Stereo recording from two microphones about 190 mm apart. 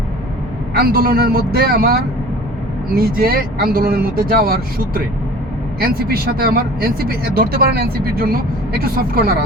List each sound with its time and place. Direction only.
0.8 s speech: 50° right (ahead or behind)
6.1 s speech: 50° right (ahead or behind)